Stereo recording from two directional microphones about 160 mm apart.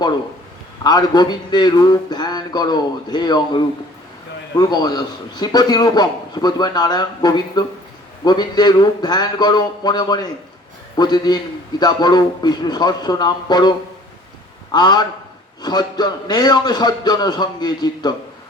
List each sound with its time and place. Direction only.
0.9 s a man's voice: 25° left (ahead or behind)